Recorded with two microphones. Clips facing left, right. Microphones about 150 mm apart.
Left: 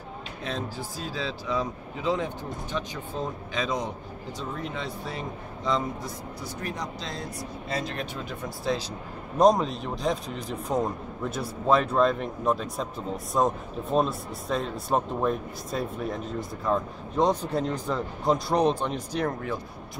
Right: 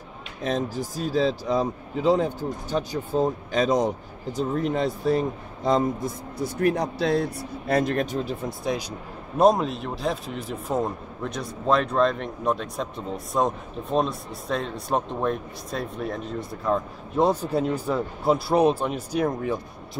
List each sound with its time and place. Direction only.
0.4 s speech: 40° right (ahead or behind)
9.4 s a man's voice: 5° right (ahead or behind)